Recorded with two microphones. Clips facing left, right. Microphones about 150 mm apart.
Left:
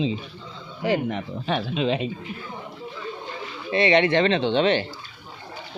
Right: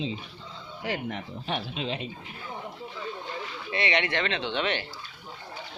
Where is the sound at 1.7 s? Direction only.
90° left.